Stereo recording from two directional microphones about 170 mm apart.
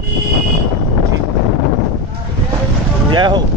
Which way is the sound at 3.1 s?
25° right (ahead or behind).